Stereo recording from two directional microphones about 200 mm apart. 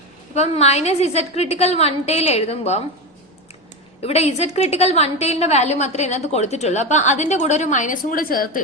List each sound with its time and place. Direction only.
0.3 s a woman's voice: 35° left (ahead or behind)
4.0 s a woman's voice: 30° left (ahead or behind)